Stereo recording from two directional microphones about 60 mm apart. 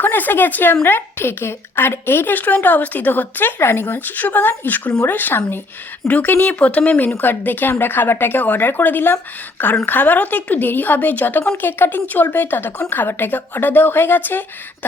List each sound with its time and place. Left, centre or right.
0.0 s a woman's voice: left